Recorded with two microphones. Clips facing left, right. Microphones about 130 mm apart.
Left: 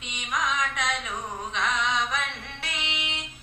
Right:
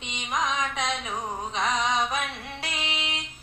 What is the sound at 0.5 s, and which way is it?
Carnatic music, 30° right (ahead or behind).